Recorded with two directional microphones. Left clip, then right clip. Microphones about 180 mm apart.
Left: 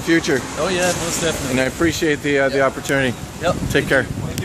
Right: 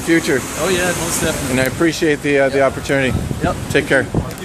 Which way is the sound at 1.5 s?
Centre (ahead or behind).